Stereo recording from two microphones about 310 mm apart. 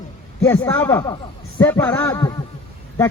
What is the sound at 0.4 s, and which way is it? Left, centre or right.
A man's voice, centre.